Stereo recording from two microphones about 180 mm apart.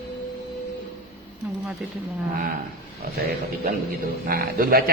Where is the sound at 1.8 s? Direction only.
5° right (ahead or behind).